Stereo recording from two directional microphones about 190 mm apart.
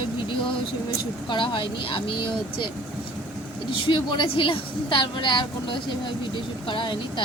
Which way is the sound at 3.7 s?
25° left (ahead or behind).